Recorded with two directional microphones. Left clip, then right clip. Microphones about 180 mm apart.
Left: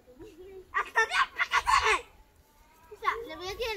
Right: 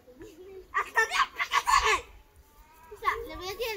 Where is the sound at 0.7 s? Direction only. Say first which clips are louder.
Right 1 dB; 15° right (ahead or behind).